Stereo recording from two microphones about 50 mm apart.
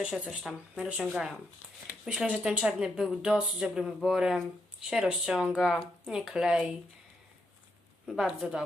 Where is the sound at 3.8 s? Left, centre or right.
Centre.